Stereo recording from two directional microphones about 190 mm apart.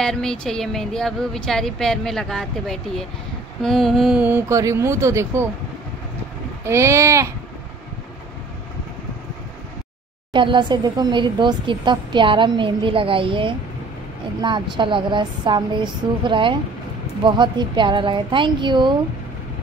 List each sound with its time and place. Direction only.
0.0 s a woman's voice: 5° left (ahead or behind); by 5.5 s 15° right (ahead or behind)
6.6 s speech: 15° right (ahead or behind)
10.3 s speech: 25° right (ahead or behind)